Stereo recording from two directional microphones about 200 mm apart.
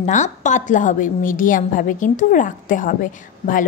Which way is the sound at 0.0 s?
35° left (ahead or behind).